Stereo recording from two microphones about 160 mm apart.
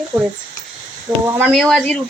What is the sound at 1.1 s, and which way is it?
Speech, 25° right (ahead or behind).